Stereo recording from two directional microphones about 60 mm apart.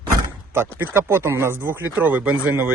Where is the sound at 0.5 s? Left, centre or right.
Right.